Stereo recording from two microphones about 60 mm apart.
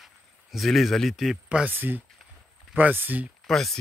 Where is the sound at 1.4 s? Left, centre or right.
Right.